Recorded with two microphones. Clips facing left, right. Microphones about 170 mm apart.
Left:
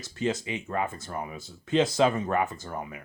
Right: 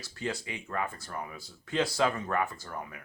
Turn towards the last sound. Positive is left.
turn(degrees=20)  # may be behind; listen again after turning